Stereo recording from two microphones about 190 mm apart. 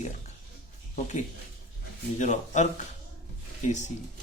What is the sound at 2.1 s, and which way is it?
Speech, 40° left (ahead or behind).